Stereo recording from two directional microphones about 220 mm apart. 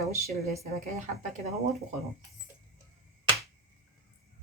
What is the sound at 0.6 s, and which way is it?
Speech, 35° right (ahead or behind).